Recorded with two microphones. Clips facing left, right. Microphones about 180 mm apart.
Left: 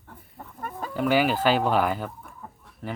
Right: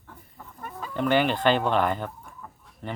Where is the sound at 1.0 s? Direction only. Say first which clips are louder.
Left 1 dB; 5° left (ahead or behind).